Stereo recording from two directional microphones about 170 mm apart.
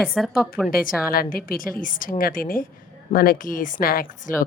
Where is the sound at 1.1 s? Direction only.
60° left (ahead or behind).